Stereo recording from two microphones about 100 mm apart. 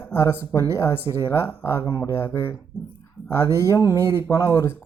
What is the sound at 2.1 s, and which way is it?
Speech, 25° left (ahead or behind).